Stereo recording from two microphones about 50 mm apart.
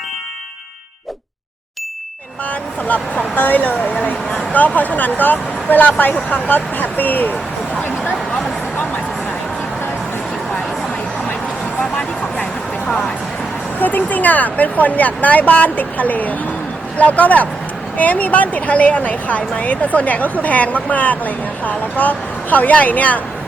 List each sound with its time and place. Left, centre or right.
2.8 s a woman's voice: left
13.7 s a woman's voice: left